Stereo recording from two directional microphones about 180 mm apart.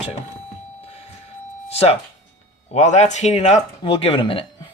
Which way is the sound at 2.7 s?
40° left (ahead or behind).